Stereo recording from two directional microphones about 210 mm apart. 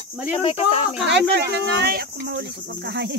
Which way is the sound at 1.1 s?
55° right (ahead or behind).